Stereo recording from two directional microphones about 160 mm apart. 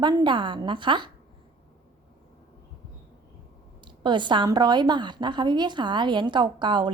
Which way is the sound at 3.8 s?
30° right (ahead or behind).